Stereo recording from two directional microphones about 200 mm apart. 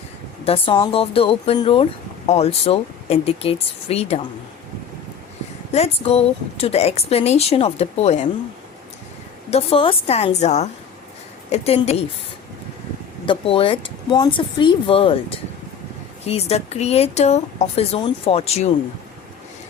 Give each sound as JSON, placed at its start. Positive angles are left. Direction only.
{"t": 0.4, "sound": "speech", "side_deg": 30}
{"t": 5.7, "sound": "a woman's voice", "side_deg": 30}
{"t": 9.5, "sound": "a woman's voice", "side_deg": 30}
{"t": 13.2, "sound": "a woman's voice", "side_deg": 25}